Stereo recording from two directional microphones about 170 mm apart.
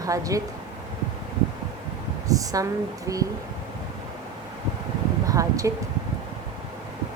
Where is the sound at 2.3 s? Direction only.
20° right (ahead or behind).